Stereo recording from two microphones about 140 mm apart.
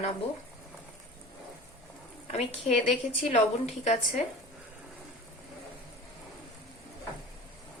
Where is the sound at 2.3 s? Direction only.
50° left (ahead or behind).